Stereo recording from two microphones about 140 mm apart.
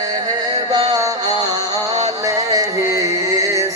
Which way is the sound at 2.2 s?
25° right (ahead or behind).